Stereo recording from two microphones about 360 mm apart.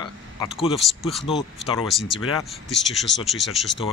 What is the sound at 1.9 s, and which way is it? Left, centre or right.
Speech, centre.